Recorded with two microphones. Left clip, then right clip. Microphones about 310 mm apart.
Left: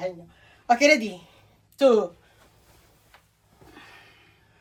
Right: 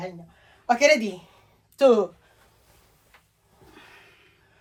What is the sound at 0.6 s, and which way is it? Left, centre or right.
A woman's voice, right.